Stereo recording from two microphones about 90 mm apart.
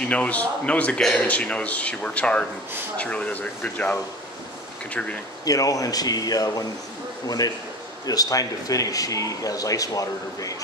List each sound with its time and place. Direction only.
0.1 s a man's voice: 15° left (ahead or behind)
5.4 s speech: 40° left (ahead or behind)